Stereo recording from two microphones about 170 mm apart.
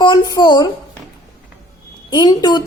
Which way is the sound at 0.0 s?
25° left (ahead or behind).